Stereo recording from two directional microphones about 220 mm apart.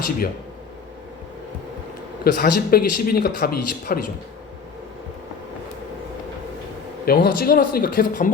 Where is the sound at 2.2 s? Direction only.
40° left (ahead or behind).